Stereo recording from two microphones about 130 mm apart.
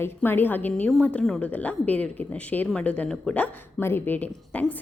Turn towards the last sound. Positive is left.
turn(degrees=10)  # may be behind; listen again after turning